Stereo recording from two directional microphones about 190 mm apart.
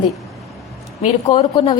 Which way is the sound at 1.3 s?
30° left (ahead or behind).